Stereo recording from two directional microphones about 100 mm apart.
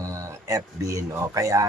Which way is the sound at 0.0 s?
35° right (ahead or behind).